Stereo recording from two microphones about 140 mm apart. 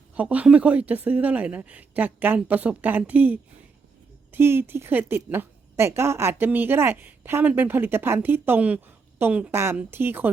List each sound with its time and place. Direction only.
0.2 s a woman's voice: 10° right (ahead or behind)